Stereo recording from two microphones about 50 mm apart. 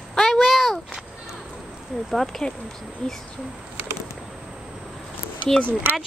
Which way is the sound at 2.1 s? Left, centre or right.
Centre.